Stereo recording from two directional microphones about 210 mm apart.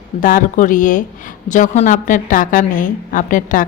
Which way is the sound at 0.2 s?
40° left (ahead or behind).